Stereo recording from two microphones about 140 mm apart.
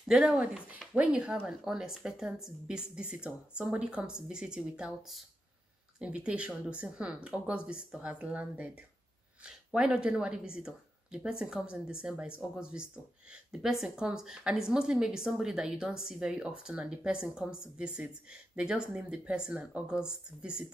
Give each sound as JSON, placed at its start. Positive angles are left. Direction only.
{"t": 0.1, "sound": "speech", "side_deg": -5}